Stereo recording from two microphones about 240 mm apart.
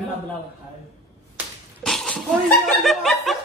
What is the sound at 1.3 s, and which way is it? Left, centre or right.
Slap, centre.